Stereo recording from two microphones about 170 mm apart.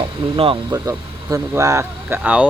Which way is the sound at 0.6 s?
20° right (ahead or behind).